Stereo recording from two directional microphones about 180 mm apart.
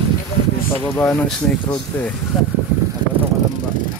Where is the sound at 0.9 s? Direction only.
10° left (ahead or behind).